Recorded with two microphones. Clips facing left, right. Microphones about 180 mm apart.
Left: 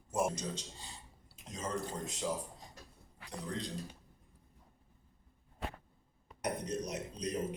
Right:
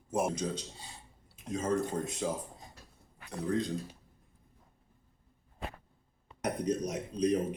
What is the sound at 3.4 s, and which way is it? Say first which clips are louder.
Speech: right 10 dB; 50° right (ahead or behind).